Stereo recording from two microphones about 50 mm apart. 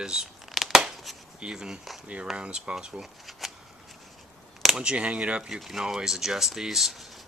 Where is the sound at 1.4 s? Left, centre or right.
Centre.